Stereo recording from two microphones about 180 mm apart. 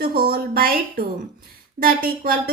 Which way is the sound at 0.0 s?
55° right (ahead or behind).